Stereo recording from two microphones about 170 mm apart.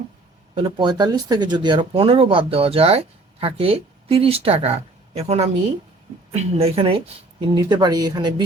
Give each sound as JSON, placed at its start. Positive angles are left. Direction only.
{"t": 0.5, "sound": "a woman's voice", "side_deg": -25}